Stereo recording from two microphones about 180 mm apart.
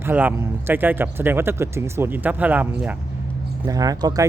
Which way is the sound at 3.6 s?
20° right (ahead or behind).